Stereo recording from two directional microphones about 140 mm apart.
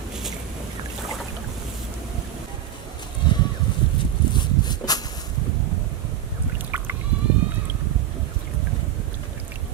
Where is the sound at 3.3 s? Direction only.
30° left (ahead or behind).